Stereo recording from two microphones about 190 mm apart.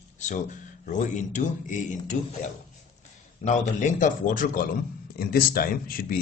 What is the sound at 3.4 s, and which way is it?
Speech, 45° left (ahead or behind).